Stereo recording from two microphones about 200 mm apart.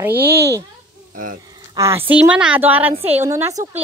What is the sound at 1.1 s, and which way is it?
Speech, 45° right (ahead or behind).